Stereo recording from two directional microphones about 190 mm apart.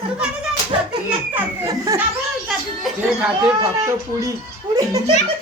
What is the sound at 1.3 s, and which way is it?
Speech, 15° right (ahead or behind).